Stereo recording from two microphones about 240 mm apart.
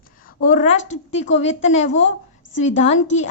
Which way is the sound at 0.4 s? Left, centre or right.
Left.